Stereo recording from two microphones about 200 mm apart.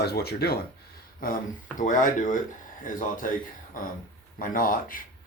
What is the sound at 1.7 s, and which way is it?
Speech, 40° left (ahead or behind).